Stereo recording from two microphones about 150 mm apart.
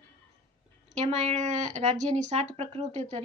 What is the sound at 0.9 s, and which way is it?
A woman's voice, 50° right (ahead or behind).